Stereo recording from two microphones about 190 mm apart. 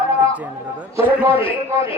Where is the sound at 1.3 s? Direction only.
30° left (ahead or behind).